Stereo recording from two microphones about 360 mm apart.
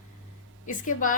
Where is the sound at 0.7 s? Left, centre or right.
Left.